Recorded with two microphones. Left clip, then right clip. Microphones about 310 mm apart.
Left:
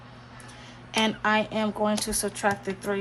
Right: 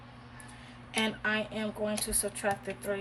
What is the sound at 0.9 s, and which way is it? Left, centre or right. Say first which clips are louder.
Speech: left 7 dB; centre.